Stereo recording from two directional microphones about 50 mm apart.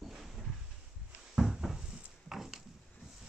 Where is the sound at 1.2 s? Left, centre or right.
Centre.